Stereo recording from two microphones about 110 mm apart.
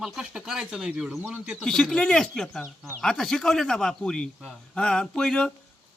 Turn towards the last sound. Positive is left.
turn(degrees=5)  # may be behind; listen again after turning